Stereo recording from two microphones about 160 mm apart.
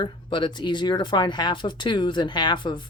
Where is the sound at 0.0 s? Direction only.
30° left (ahead or behind).